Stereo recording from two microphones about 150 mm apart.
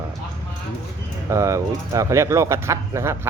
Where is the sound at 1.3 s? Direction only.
20° right (ahead or behind).